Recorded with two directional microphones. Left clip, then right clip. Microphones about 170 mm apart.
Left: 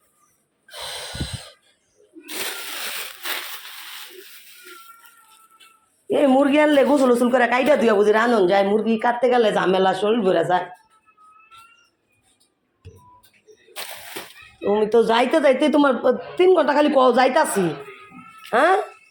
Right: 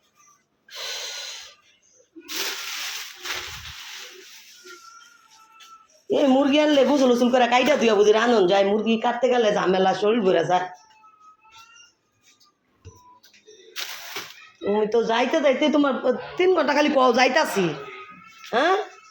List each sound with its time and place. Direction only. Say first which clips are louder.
0.7 s gasp: even; 10° left (ahead or behind)
6.1 s a man's voice: left 2 dB; 5° left (ahead or behind)
14.6 s a man's voice: left 4 dB; 20° left (ahead or behind)